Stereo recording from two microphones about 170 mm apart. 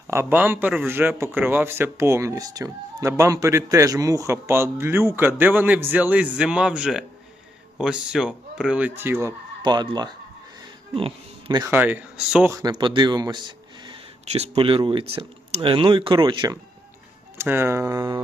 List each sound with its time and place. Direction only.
0.1 s speech: 15° right (ahead or behind)
9.6 s speech: 25° right (ahead or behind)
11.6 s speech: 10° right (ahead or behind)
12.5 s speech: 25° right (ahead or behind)
17.3 s speech: 15° right (ahead or behind)